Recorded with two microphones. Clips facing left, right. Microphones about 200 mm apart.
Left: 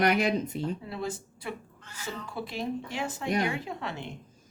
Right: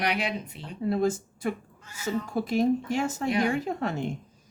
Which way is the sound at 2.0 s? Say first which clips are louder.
Right 8 dB; 45° right (ahead or behind).